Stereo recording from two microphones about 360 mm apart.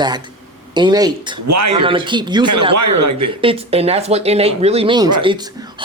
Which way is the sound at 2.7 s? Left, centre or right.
Right.